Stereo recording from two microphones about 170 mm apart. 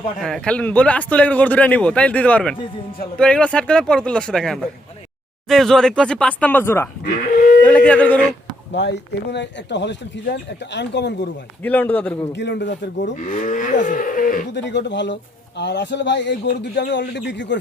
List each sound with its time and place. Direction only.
0.2 s a man's voice: 5° left (ahead or behind)
7.0 s speech: 50° left (ahead or behind)
7.9 s a man's voice: 10° left (ahead or behind)
8.7 s speech: 90° left
11.6 s a man's voice: 10° left (ahead or behind)
12.3 s speech: 90° left
13.1 s moo: 50° left (ahead or behind)
14.5 s speech: 90° left